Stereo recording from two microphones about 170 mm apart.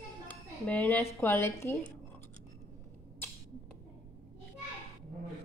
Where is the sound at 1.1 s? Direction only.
15° left (ahead or behind).